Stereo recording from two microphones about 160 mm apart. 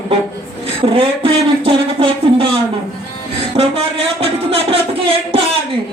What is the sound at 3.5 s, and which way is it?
Speech, 35° right (ahead or behind).